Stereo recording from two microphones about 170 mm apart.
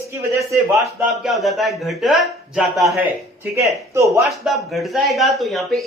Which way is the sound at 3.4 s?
15° right (ahead or behind).